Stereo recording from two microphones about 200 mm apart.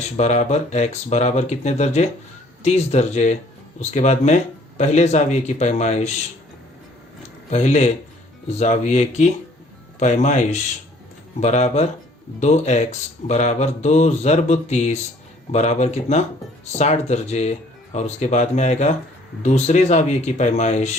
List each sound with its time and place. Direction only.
0.2 s speech: 35° left (ahead or behind)
7.5 s speech: 35° left (ahead or behind)